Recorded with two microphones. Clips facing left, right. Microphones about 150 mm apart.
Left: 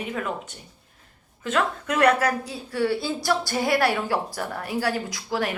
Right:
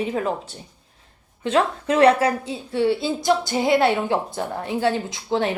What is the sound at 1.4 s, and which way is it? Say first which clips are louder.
A woman's voice: right 4 dB; 30° right (ahead or behind).